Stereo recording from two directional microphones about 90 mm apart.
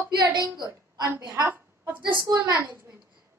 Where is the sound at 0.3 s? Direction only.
55° right (ahead or behind).